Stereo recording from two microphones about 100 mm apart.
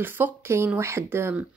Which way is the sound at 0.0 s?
25° right (ahead or behind).